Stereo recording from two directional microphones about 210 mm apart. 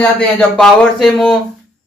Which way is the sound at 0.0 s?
5° left (ahead or behind).